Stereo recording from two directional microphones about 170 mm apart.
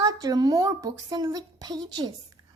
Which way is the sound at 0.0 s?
20° right (ahead or behind).